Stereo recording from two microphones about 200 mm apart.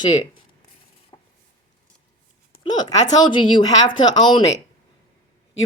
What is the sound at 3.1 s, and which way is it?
Speech, 25° left (ahead or behind).